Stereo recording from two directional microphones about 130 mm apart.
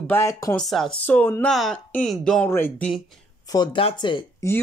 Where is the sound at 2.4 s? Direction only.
15° left (ahead or behind).